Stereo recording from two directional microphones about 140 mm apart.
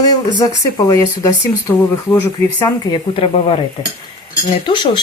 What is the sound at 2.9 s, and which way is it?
Speech, 40° left (ahead or behind).